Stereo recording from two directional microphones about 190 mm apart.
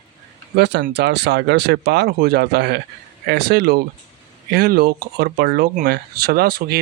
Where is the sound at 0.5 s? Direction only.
60° right (ahead or behind).